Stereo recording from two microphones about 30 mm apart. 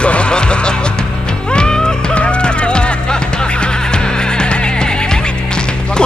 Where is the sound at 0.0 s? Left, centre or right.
Left.